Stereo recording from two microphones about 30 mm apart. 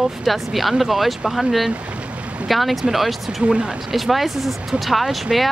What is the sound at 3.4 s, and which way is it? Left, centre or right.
Speech, right.